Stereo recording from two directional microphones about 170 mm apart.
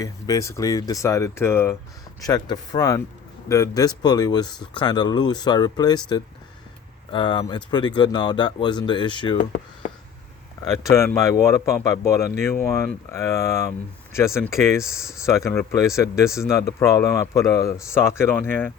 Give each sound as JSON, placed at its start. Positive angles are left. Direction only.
{"t": 0.0, "sound": "speech", "side_deg": 20}
{"t": 7.1, "sound": "speech", "side_deg": 25}
{"t": 10.7, "sound": "speech", "side_deg": 20}
{"t": 14.8, "sound": "speech", "side_deg": -5}
{"t": 15.2, "sound": "speech", "side_deg": 15}